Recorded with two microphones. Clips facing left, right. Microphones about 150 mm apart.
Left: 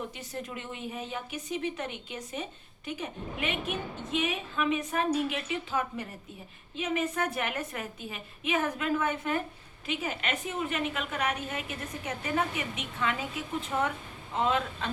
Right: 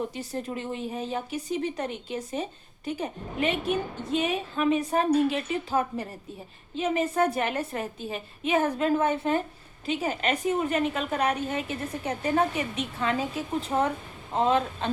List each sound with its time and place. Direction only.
0.1 s speech: 35° right (ahead or behind)